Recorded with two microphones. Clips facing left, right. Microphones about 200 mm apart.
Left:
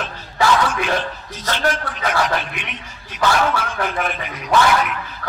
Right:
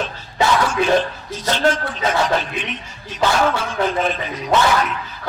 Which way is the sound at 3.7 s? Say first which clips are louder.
Right 4 dB; 20° right (ahead or behind).